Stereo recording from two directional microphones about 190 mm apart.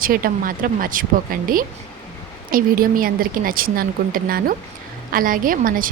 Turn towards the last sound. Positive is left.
turn(degrees=-45)  # may be behind; listen again after turning